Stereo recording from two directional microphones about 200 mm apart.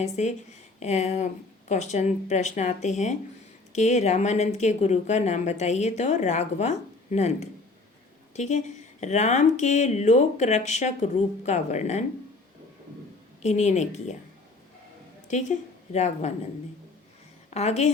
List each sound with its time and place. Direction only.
0.0 s speech: 35° left (ahead or behind)
13.4 s speech: 35° left (ahead or behind)
15.3 s a woman's voice: 35° left (ahead or behind)
17.5 s a woman's voice: 30° left (ahead or behind)